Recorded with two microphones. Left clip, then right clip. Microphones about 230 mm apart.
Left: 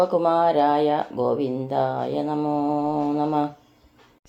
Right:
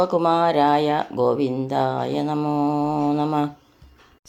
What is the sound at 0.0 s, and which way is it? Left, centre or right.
Speech, right.